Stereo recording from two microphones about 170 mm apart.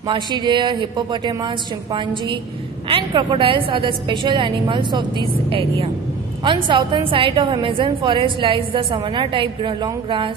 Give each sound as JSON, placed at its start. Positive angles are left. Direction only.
{"t": 0.1, "sound": "a woman's voice", "side_deg": -25}